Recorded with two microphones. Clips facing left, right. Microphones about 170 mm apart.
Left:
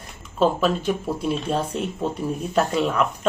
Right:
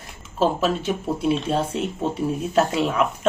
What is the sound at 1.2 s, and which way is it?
Speech, centre (ahead or behind).